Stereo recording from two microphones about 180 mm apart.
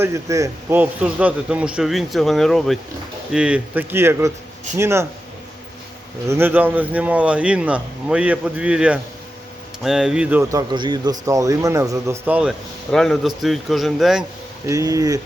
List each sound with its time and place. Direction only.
0.0 s speech: 15° right (ahead or behind)
6.2 s speech: 15° right (ahead or behind)
14.7 s speech: 20° right (ahead or behind)